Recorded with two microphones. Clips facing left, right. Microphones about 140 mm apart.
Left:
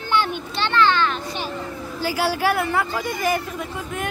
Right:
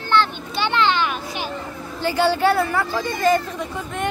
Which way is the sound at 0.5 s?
15° right (ahead or behind).